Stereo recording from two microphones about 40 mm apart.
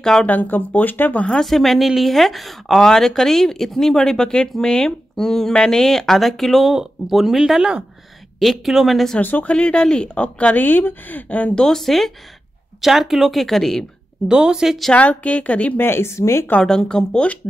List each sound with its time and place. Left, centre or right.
0.0 s speech: centre
0.3 s speech: left
1.4 s speech: centre
2.8 s speech: centre
6.7 s speech: centre
9.2 s speech: left
9.5 s speech: left
11.5 s speech: centre
12.8 s speech: centre
14.2 s speech: centre
15.0 s a woman's voice: left
15.8 s speech: left
16.6 s speech: centre